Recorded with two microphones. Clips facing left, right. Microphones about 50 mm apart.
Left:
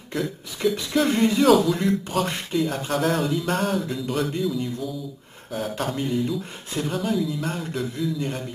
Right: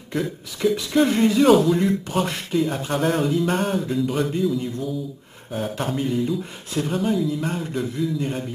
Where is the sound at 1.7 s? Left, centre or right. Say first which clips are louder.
Right 2 dB; centre.